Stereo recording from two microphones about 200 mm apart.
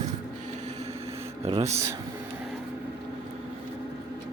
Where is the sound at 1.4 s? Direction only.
30° right (ahead or behind).